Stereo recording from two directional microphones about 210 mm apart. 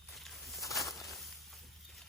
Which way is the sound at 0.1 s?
Centre (ahead or behind).